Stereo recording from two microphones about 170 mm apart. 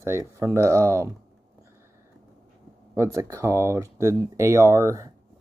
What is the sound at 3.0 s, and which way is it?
Speech, 15° right (ahead or behind).